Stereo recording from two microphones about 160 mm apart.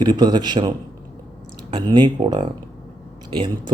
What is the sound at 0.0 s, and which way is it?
Speech, 25° right (ahead or behind).